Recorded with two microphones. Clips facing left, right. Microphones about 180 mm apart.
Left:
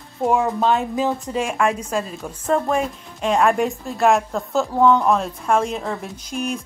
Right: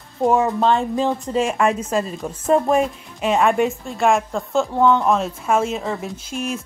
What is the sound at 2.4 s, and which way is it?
Speech, 20° right (ahead or behind).